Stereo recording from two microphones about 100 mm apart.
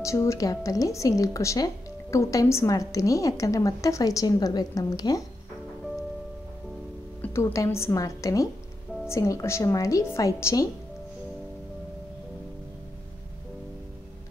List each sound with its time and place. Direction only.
0.0 s a woman's voice: 30° left (ahead or behind)
7.2 s music: 20° left (ahead or behind)
7.5 s a woman's voice: 30° left (ahead or behind)